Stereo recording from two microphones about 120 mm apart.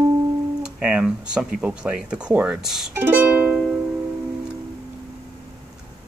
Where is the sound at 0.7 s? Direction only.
10° right (ahead or behind).